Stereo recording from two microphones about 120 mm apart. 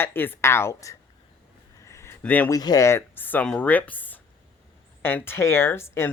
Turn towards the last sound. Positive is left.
turn(degrees=20)  # may be behind; listen again after turning